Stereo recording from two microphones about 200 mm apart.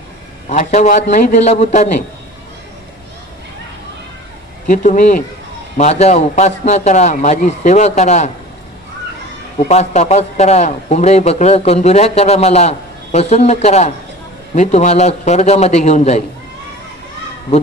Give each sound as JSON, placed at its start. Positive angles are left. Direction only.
{"t": 0.5, "sound": "a man's voice", "side_deg": 40}
{"t": 4.6, "sound": "a man's voice", "side_deg": 40}
{"t": 9.6, "sound": "a man's voice", "side_deg": 35}